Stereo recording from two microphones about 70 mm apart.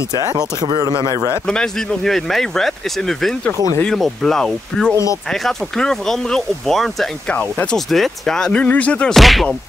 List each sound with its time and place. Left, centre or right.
0.1 s speech: right
1.0 s a man's voice: left
1.5 s speech: centre
7.2 s speech: left
7.7 s speech: centre
9.1 s speech: centre